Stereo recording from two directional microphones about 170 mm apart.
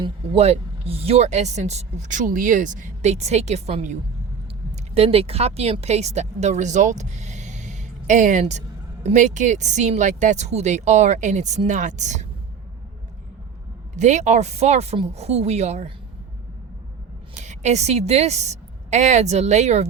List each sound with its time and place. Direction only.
0.0 s speech: 40° right (ahead or behind)
13.9 s speech: 45° right (ahead or behind)
17.3 s a woman's voice: 45° right (ahead or behind)